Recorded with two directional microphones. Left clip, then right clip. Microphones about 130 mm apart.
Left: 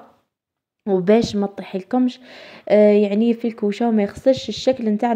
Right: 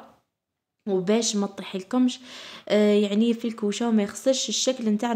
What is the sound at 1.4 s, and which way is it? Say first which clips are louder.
A woman's voice: left 6 dB; 30° left (ahead or behind).